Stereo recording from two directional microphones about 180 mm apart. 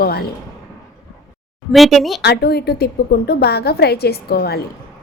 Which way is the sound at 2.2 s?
65° left (ahead or behind).